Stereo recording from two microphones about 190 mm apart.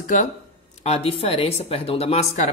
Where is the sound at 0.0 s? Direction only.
40° left (ahead or behind).